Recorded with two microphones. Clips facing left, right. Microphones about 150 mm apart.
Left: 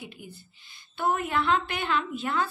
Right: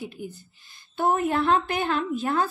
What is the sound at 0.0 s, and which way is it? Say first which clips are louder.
A woman's voice: right 7 dB; 40° right (ahead or behind).